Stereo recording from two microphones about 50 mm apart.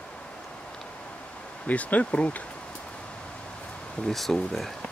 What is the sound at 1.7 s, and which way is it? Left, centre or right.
Speech, left.